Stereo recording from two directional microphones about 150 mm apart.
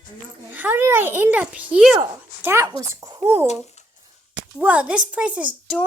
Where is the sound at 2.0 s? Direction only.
15° right (ahead or behind).